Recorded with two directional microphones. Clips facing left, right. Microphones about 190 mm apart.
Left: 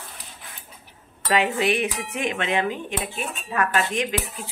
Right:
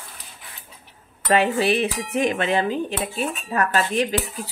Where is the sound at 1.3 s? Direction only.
35° right (ahead or behind).